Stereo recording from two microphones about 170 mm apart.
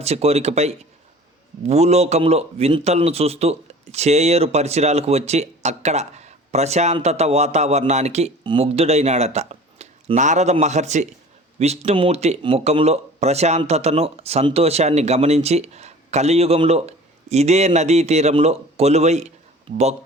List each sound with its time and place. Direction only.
0.0 s speech: 35° right (ahead or behind)